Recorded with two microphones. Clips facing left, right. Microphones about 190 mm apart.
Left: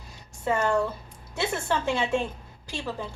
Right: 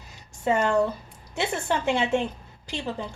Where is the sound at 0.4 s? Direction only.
15° right (ahead or behind).